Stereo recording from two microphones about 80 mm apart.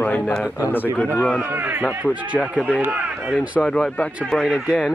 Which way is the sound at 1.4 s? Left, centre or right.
Right.